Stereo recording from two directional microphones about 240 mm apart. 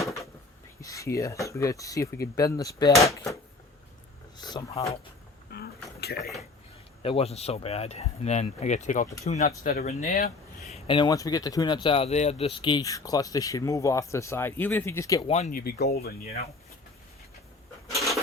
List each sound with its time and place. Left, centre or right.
0.8 s speech: centre
4.4 s speech: centre
5.5 s a sound: left
7.0 s speech: left
10.7 s speech: left
15.3 s speech: left
17.9 s a sound: centre